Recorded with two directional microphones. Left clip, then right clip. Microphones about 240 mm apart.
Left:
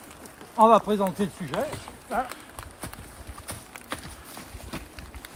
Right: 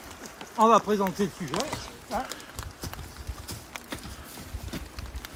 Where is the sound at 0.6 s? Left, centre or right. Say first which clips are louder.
Left 2 dB; left.